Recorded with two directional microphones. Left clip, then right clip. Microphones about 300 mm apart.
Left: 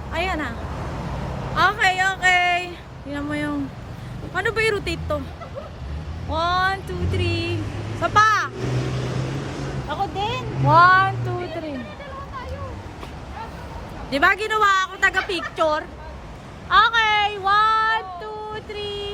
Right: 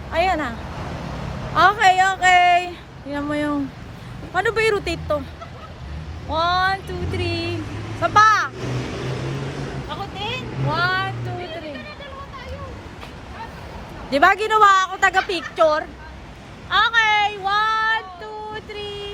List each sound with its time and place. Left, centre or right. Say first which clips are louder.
0.1 s vehicle: right 5 dB; centre
1.5 s a sound: right 4 dB; centre
4.4 s a woman's voice: right 2 dB; centre
6.3 s speech: right 2 dB; centre
9.9 s vehicle: left 4 dB; left
10.7 s speech: left 8 dB; centre
14.1 s a woman's voice: right 3 dB; centre
18.5 s a sound: left 1 dB; centre